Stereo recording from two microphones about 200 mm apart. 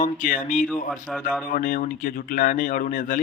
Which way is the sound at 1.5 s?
40° left (ahead or behind).